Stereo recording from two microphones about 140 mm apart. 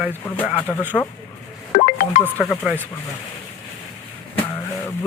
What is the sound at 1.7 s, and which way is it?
Music, 80° left.